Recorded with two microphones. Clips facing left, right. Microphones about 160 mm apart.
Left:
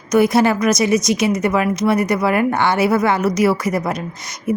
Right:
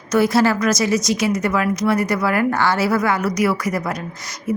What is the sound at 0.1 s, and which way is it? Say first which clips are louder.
A woman's voice: left 2 dB; 20° left (ahead or behind).